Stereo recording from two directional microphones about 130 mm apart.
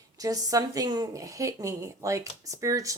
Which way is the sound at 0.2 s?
25° right (ahead or behind).